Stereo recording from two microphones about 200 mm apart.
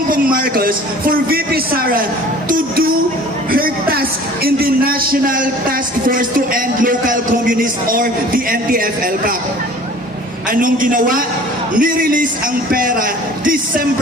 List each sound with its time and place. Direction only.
0.1 s a man's voice: 45° right (ahead or behind)
2.5 s music: 45° right (ahead or behind)
3.5 s a sound: 45° right (ahead or behind)
4.4 s a man's voice: 50° right (ahead or behind)
10.5 s a man's voice: 45° right (ahead or behind)